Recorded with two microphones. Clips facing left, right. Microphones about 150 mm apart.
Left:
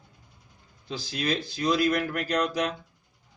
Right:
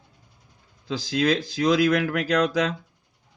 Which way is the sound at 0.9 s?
90° right.